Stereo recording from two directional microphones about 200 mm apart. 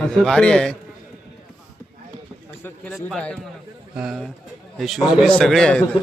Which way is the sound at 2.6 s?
5° left (ahead or behind).